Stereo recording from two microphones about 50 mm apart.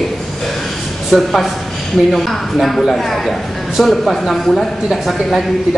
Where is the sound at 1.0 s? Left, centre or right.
Centre.